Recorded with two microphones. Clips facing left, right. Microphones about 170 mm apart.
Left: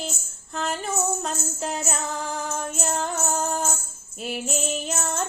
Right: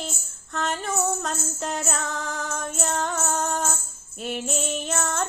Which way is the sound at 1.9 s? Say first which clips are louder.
Left 1 dB; 30° left (ahead or behind).